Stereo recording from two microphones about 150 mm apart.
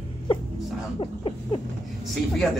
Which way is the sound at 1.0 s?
35° left (ahead or behind).